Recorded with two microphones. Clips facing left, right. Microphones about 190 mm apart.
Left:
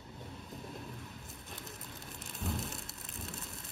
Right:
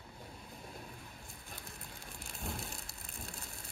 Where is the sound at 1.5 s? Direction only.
20° left (ahead or behind).